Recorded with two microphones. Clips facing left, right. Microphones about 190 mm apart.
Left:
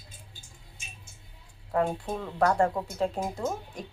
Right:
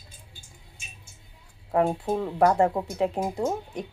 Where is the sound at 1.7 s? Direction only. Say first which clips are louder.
Right 4 dB; 25° right (ahead or behind).